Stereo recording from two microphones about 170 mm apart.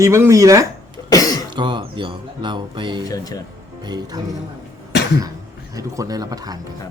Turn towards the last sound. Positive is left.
turn(degrees=-20)  # may be behind; listen again after turning